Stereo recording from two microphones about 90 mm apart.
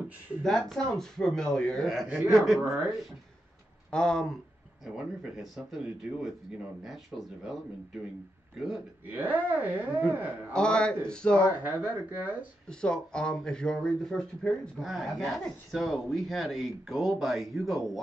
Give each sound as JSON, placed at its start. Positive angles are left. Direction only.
{"t": 0.4, "sound": "speech", "side_deg": 5}
{"t": 3.9, "sound": "speech", "side_deg": 10}
{"t": 4.9, "sound": "speech", "side_deg": -5}
{"t": 8.5, "sound": "speech", "side_deg": -5}
{"t": 9.0, "sound": "speech", "side_deg": -20}
{"t": 10.5, "sound": "speech", "side_deg": 10}
{"t": 11.6, "sound": "speech", "side_deg": -20}
{"t": 12.6, "sound": "speech", "side_deg": 10}